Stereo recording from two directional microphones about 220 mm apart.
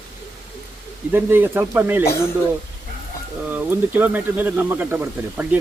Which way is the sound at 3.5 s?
10° right (ahead or behind).